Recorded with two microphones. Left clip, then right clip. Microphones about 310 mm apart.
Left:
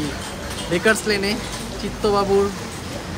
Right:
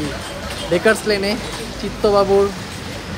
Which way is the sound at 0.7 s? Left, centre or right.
Centre.